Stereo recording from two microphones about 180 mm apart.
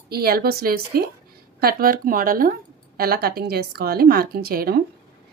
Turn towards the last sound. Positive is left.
turn(degrees=-55)  # may be behind; listen again after turning